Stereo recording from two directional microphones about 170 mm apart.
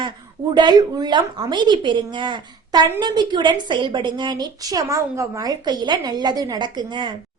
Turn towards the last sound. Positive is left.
turn(degrees=-25)  # may be behind; listen again after turning